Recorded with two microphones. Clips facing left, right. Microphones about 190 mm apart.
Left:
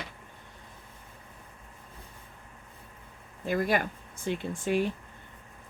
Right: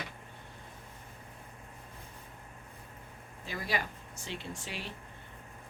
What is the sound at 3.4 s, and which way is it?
Speech, 55° left (ahead or behind).